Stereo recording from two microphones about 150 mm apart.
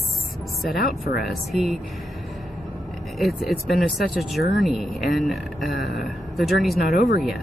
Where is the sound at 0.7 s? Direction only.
80° left.